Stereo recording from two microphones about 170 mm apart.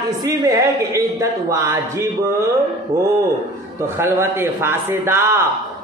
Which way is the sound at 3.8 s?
15° right (ahead or behind).